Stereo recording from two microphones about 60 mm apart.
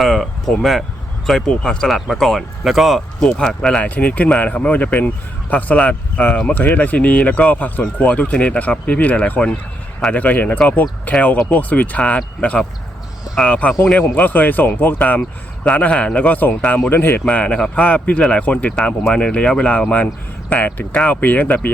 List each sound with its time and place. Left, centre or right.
0.0 s speech: centre
3.8 s speech: left
16.9 s speech: left
17.2 s speech: left